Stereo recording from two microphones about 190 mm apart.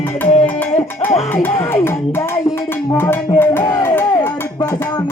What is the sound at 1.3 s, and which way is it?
Music, 10° left (ahead or behind).